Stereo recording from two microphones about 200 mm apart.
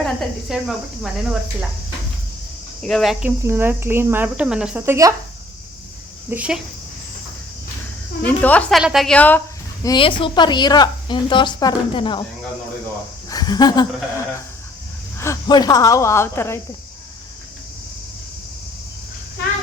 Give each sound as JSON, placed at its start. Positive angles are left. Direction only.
{"t": 0.0, "sound": "cricket", "side_deg": 0}
{"t": 2.8, "sound": "cricket", "side_deg": 0}
{"t": 6.3, "sound": "cricket", "side_deg": -5}
{"t": 8.2, "sound": "speech", "side_deg": 10}
{"t": 8.8, "sound": "cricket", "side_deg": 0}
{"t": 9.8, "sound": "a woman's voice", "side_deg": 25}
{"t": 13.3, "sound": "a woman's voice", "side_deg": 20}
{"t": 15.2, "sound": "speech", "side_deg": 20}